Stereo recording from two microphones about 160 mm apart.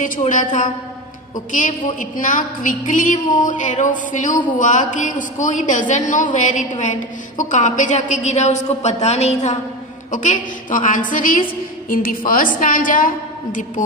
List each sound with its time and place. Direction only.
0.0 s a woman's voice: 55° left (ahead or behind)